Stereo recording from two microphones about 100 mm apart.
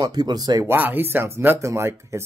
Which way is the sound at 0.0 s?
45° right (ahead or behind).